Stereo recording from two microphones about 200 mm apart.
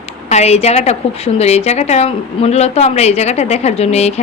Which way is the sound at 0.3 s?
30° left (ahead or behind).